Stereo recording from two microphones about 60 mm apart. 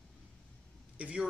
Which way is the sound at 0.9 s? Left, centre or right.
Right.